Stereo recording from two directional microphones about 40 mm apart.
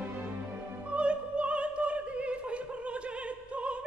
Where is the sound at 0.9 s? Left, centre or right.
Right.